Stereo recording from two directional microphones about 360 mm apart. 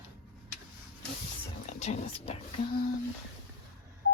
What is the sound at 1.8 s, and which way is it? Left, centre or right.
Speech, centre.